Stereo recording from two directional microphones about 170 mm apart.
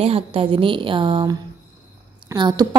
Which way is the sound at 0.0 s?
35° right (ahead or behind).